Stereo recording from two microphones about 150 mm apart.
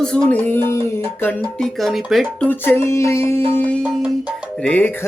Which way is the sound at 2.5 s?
15° left (ahead or behind).